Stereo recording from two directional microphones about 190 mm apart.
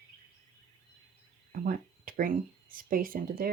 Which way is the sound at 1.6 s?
45° right (ahead or behind).